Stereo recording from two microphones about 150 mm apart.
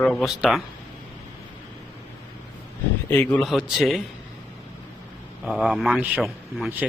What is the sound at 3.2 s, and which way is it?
Speech, 5° left (ahead or behind).